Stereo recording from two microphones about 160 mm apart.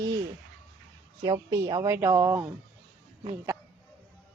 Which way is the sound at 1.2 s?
20° right (ahead or behind).